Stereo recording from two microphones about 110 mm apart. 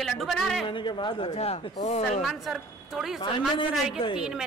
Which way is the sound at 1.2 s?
80° left.